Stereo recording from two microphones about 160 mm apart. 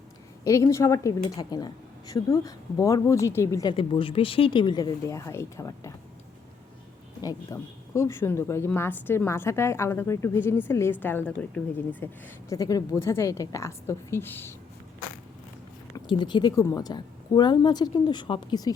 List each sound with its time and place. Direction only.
0.4 s a woman's voice: 20° left (ahead or behind)
7.2 s speech: 20° left (ahead or behind)
12.5 s speech: 25° left (ahead or behind)
16.0 s a woman's voice: 30° left (ahead or behind)